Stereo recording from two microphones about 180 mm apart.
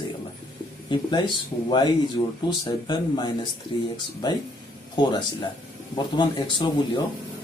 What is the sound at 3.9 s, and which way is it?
Speech, 25° left (ahead or behind).